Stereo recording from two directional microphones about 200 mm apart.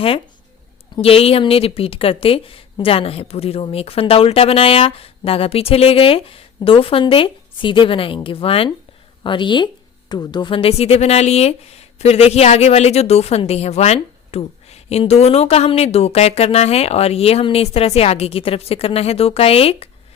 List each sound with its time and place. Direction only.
0.9 s speech: 30° left (ahead or behind)